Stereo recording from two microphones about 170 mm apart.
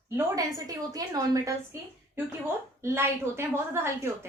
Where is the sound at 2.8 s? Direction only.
15° right (ahead or behind).